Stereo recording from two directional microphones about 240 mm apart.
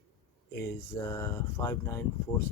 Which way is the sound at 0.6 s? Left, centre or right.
Centre.